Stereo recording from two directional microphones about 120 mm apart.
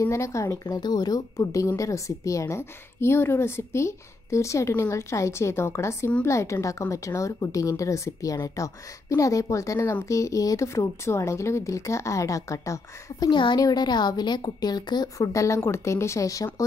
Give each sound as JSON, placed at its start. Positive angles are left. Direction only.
{"t": 0.0, "sound": "a woman's voice", "side_deg": 25}
{"t": 13.3, "sound": "a woman's voice", "side_deg": 40}